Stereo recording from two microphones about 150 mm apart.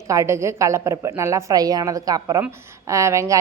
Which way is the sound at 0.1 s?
20° right (ahead or behind).